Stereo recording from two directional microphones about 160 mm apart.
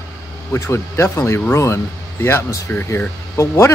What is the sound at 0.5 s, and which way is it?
Speech, 15° left (ahead or behind).